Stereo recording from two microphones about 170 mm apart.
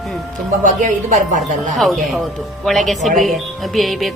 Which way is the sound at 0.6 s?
50° right (ahead or behind).